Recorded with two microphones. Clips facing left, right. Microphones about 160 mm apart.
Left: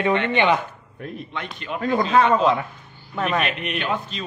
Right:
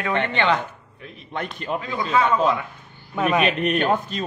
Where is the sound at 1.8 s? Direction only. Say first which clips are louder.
Left 5 dB; 50° left (ahead or behind).